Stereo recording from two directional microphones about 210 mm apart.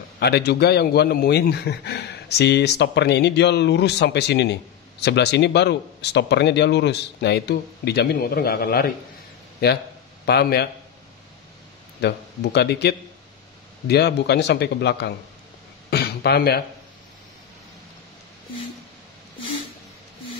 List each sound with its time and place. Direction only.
0.2 s a man's voice: 50° left (ahead or behind)
10.2 s a man's voice: 50° left (ahead or behind)
12.5 s a man's voice: 55° left (ahead or behind)